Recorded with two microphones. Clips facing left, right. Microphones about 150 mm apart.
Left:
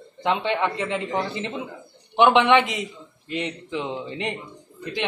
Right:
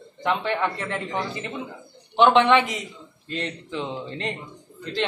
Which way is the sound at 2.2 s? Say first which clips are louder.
Even; 15° left (ahead or behind).